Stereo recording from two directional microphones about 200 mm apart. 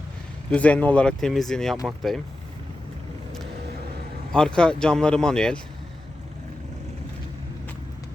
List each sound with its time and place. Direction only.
0.5 s speech: 5° left (ahead or behind)
4.3 s speech: 5° left (ahead or behind)